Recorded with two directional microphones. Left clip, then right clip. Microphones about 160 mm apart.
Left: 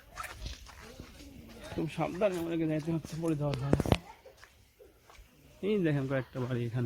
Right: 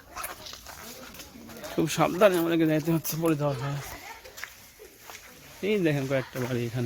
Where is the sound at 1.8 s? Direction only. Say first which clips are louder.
Right 10 dB; 35° right (ahead or behind).